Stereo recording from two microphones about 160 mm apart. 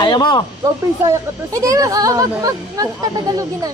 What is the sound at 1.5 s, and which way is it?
Speech, 20° right (ahead or behind).